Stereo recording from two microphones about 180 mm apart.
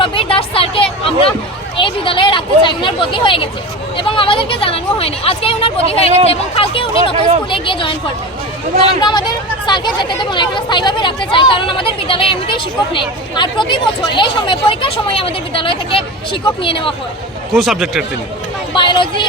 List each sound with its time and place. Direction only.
0.0 s a sound: 30° left (ahead or behind)
1.7 s speech: 30° left (ahead or behind)
9.0 s speech: 25° left (ahead or behind)
17.5 s speech: centre (ahead or behind)
18.7 s speech: 25° left (ahead or behind)